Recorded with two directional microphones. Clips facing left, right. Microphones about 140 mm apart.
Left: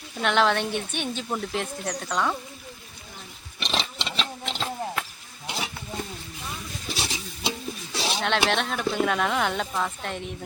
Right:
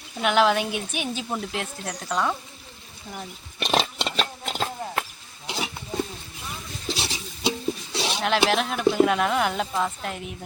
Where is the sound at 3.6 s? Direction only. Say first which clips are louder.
Right 6 dB; 45° right (ahead or behind).